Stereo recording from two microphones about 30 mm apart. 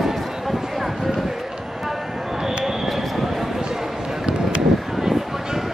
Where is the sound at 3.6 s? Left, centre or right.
Right.